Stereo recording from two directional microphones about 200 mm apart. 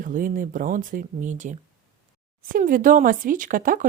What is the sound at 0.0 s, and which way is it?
Speech, 45° right (ahead or behind).